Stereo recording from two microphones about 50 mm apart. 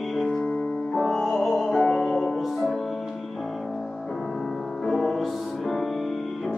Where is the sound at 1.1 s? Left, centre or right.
Centre.